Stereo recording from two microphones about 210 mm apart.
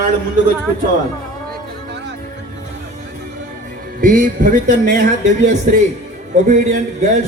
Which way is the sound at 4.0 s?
40° right (ahead or behind).